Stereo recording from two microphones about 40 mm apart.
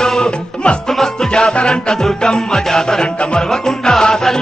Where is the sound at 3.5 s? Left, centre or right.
Centre.